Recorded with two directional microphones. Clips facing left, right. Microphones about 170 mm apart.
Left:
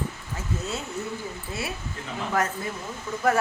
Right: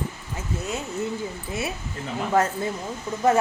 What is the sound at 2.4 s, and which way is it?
Speech, 25° right (ahead or behind).